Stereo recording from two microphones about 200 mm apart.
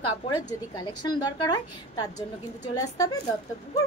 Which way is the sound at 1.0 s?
20° left (ahead or behind).